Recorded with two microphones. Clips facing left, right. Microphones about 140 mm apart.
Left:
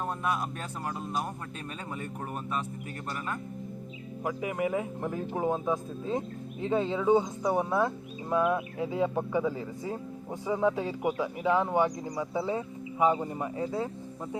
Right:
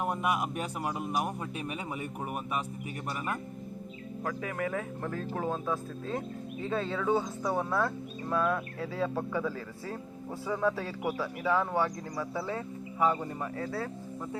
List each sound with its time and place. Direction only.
0.0 s speech: 15° right (ahead or behind)
4.2 s speech: 15° left (ahead or behind)